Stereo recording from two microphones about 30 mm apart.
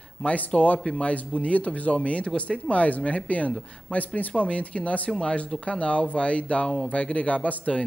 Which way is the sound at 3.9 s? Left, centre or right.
Left.